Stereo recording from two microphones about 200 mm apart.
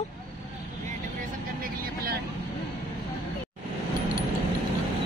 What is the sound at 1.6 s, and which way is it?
Vehicle, 50° right (ahead or behind).